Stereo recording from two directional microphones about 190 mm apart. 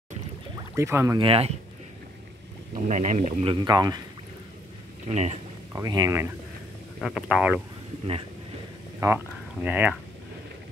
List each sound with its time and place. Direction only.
0.7 s speech: 15° right (ahead or behind)
1.2 s speech: 30° right (ahead or behind)
2.7 s speech: 40° right (ahead or behind)
3.6 s speech: 20° right (ahead or behind)
5.1 s speech: 35° right (ahead or behind)
5.7 s speech: 20° right (ahead or behind)
7.0 s speech: centre (ahead or behind)
9.0 s speech: 10° right (ahead or behind)